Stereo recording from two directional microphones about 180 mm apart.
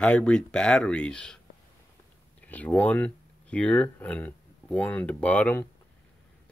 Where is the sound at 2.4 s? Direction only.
10° left (ahead or behind).